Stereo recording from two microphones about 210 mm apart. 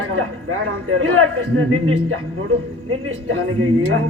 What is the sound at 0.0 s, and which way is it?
Speech, 90° right.